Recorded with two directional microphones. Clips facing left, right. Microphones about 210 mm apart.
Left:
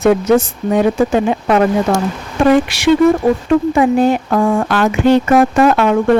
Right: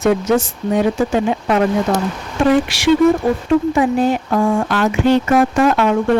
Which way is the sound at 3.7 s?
60° left (ahead or behind).